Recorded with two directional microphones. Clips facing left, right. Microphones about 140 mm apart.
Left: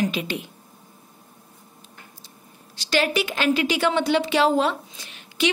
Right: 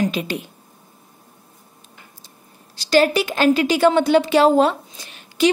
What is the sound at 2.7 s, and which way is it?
A woman's voice, 40° right (ahead or behind).